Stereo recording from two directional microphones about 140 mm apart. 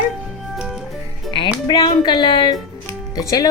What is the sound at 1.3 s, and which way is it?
Speech, 35° left (ahead or behind).